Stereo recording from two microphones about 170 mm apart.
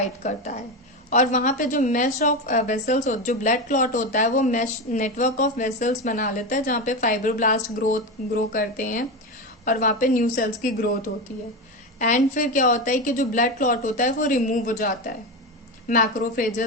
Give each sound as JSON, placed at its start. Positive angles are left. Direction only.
{"t": 0.0, "sound": "a woman's voice", "side_deg": 40}
{"t": 11.9, "sound": "a woman's voice", "side_deg": 50}